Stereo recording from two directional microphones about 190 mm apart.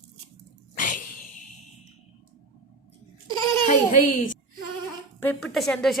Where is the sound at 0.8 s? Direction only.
45° left (ahead or behind).